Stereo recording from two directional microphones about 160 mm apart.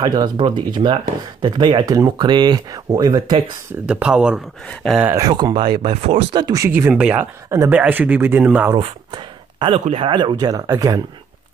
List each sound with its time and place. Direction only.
0.0 s speech: 25° right (ahead or behind)
3.8 s speech: 5° right (ahead or behind)
5.0 s speech: 20° right (ahead or behind)
7.4 s speech: 20° right (ahead or behind)
7.7 s speech: 10° right (ahead or behind)
8.7 s speech: 30° right (ahead or behind)